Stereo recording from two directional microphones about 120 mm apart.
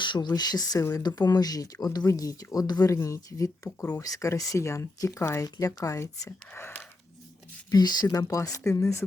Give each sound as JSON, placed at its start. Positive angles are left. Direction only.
{"t": 0.0, "sound": "speech", "side_deg": 40}
{"t": 3.8, "sound": "speech", "side_deg": 15}
{"t": 7.7, "sound": "speech", "side_deg": 35}